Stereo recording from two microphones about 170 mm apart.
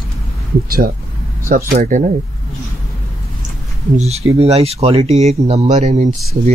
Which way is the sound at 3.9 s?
40° right (ahead or behind).